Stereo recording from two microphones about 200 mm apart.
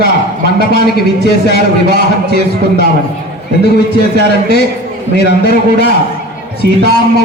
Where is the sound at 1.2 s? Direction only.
55° left (ahead or behind).